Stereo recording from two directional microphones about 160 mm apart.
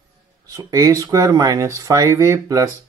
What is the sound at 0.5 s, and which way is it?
Speech, 20° right (ahead or behind).